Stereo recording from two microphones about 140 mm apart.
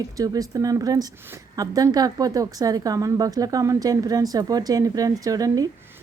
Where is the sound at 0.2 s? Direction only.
25° right (ahead or behind).